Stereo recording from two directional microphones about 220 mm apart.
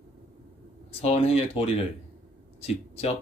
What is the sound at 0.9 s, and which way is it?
Speech, 25° left (ahead or behind).